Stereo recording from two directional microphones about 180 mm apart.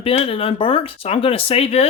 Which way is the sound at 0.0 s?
30° left (ahead or behind).